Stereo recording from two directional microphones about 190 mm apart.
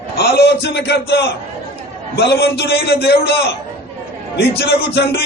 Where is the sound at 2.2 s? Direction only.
60° left (ahead or behind).